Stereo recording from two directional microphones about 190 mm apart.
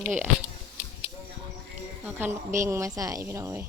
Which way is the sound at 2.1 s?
10° right (ahead or behind).